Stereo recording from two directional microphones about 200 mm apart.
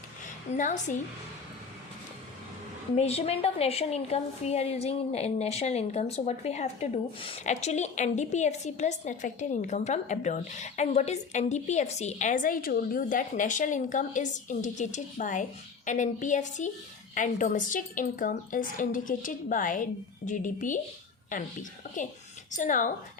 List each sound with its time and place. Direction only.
0.5 s a woman's voice: 35° left (ahead or behind)
2.9 s a woman's voice: 30° left (ahead or behind)